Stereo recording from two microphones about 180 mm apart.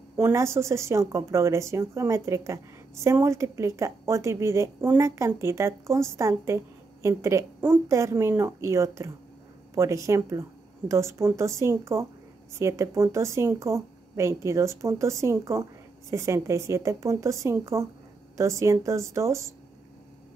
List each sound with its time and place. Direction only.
0.2 s speech: 15° right (ahead or behind)